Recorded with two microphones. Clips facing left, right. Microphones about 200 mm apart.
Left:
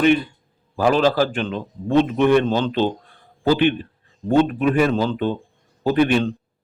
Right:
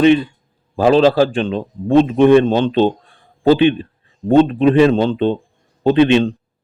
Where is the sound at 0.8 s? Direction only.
20° right (ahead or behind).